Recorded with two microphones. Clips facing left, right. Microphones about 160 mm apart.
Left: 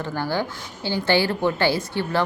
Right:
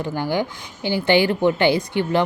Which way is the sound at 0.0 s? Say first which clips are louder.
Right 3 dB; 15° right (ahead or behind).